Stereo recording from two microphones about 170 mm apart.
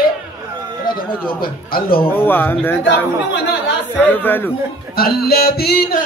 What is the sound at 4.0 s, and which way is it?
Speech, 10° left (ahead or behind).